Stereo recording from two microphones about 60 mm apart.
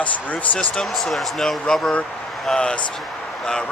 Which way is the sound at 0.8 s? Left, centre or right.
Centre.